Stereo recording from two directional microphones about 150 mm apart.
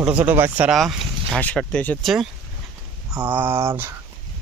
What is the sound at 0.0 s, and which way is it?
Speech, 10° right (ahead or behind).